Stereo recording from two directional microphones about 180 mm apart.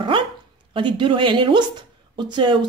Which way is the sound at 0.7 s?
30° right (ahead or behind).